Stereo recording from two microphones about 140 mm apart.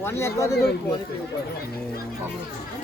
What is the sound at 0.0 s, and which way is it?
Speech, 20° left (ahead or behind).